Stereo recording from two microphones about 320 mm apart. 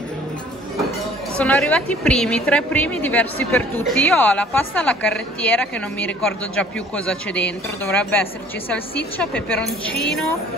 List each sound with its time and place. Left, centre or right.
1.4 s a woman's voice: centre